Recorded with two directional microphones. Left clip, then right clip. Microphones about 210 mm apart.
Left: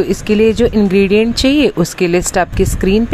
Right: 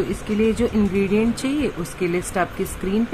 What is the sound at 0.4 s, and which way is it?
Speech, 40° left (ahead or behind).